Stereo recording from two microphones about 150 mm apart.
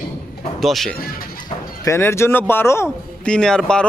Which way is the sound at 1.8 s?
15° left (ahead or behind).